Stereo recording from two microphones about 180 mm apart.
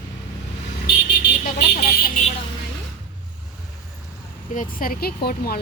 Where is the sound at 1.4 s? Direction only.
60° left (ahead or behind).